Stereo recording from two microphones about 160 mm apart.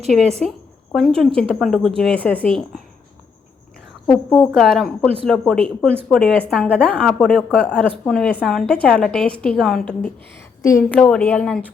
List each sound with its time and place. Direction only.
0.9 s a woman's voice: 5° left (ahead or behind)
4.0 s a woman's voice: 5° left (ahead or behind)
10.6 s a woman's voice: 20° left (ahead or behind)
10.8 s speech: 5° left (ahead or behind)